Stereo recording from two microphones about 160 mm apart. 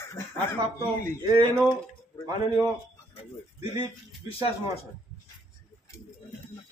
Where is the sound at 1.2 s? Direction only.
25° right (ahead or behind).